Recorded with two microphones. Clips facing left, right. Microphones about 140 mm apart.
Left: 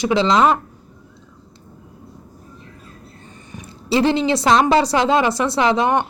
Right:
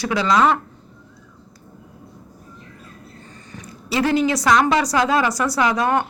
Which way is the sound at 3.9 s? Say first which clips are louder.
Left 2 dB; 25° left (ahead or behind).